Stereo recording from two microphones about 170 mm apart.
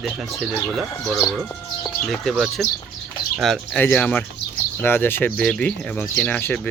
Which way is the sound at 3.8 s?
10° left (ahead or behind).